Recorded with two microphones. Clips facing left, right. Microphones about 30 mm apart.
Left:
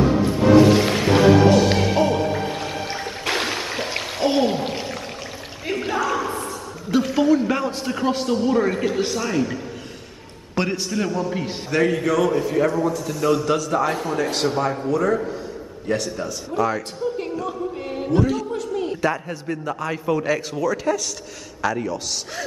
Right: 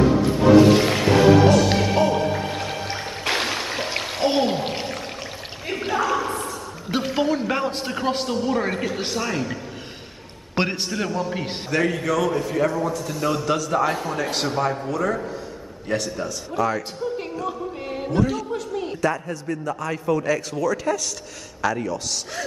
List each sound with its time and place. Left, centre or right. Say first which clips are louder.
0.2 s music: even; centre
5.7 s a sound: even; centre
6.9 s a man's voice: left 4 dB; centre
8.3 s a man's voice: left 3 dB; centre
10.5 s a man's voice: even; right
10.9 s a man's voice: left 2 dB; centre
11.7 s a man's voice: left 2 dB; centre
18.9 s a man's voice: left 1 dB; centre